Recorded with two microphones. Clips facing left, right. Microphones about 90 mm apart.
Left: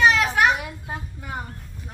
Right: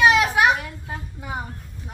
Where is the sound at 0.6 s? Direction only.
15° left (ahead or behind).